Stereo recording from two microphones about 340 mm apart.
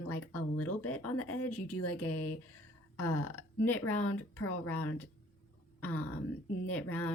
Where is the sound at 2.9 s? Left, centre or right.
Centre.